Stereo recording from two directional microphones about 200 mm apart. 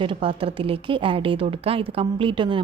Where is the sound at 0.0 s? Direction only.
25° right (ahead or behind).